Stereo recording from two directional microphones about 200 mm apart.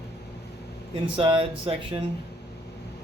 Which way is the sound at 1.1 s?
25° right (ahead or behind).